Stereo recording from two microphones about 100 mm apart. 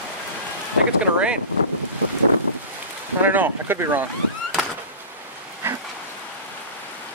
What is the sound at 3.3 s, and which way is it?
Speech, 20° right (ahead or behind).